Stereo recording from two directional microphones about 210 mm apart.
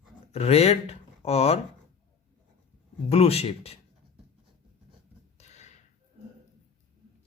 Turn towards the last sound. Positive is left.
turn(degrees=35)  # may be behind; listen again after turning